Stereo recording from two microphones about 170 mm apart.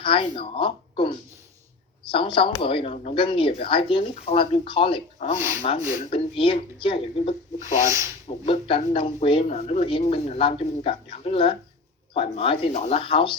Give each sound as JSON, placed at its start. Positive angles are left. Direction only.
{"t": 0.0, "sound": "speech", "side_deg": 30}
{"t": 7.9, "sound": "rub", "side_deg": -15}
{"t": 8.3, "sound": "speech", "side_deg": 30}